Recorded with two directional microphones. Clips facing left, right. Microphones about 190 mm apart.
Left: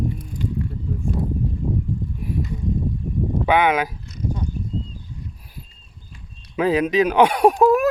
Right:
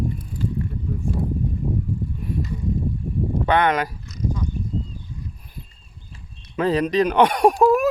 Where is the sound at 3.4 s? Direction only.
5° left (ahead or behind).